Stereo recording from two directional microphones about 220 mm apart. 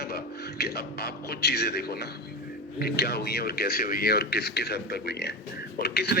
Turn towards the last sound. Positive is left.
turn(degrees=45)  # may be behind; listen again after turning